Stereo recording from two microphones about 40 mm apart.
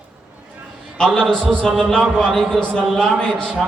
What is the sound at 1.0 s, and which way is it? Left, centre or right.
A man's voice, centre.